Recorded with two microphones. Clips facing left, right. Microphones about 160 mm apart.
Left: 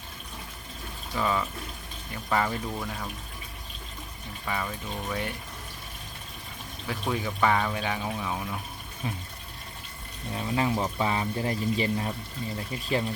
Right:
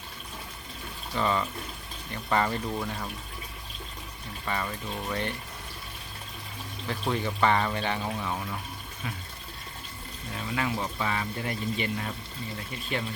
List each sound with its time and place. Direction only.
1.1 s speech: 5° left (ahead or behind)
4.4 s speech: 5° left (ahead or behind)
6.8 s speech: 5° left (ahead or behind)
10.3 s speech: 30° left (ahead or behind)